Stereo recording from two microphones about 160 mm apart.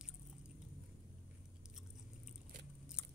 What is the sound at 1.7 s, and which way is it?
Biting, 5° right (ahead or behind).